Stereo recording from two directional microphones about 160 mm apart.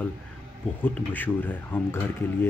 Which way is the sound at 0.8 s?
10° left (ahead or behind).